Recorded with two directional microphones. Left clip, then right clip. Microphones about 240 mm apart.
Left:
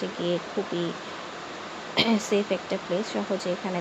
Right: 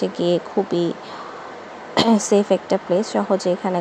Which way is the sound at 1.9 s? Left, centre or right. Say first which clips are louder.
Right 7 dB; right.